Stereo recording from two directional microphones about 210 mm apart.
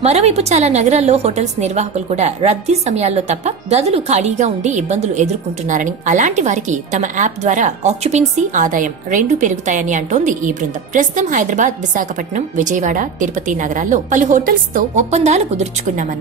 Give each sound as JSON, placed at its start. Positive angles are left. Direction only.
{"t": 0.0, "sound": "a woman's voice", "side_deg": -30}